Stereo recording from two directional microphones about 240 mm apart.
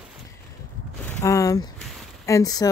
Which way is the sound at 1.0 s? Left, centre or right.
Centre.